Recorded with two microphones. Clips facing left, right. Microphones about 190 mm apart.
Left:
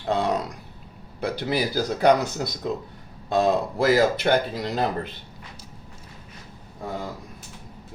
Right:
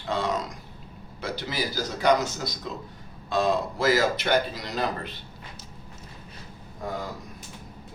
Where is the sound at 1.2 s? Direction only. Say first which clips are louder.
Left 6 dB; 60° left (ahead or behind).